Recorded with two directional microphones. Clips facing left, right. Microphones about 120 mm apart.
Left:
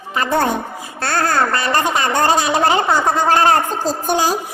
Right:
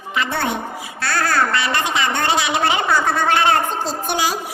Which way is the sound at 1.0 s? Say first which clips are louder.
Left 2 dB; 25° left (ahead or behind).